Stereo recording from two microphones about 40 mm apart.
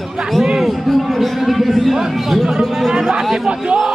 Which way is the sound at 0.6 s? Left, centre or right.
Centre.